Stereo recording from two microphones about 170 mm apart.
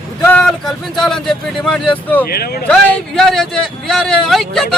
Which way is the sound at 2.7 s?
5° left (ahead or behind).